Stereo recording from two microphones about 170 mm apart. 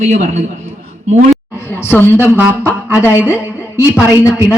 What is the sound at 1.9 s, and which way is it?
Speech, 10° left (ahead or behind).